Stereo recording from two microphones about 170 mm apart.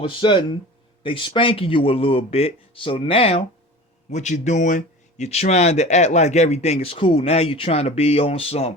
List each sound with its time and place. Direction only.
0.0 s speech: 30° left (ahead or behind)